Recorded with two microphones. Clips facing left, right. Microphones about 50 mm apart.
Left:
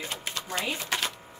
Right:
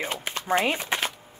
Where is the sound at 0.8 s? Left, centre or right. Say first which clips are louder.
Right 3 dB; right.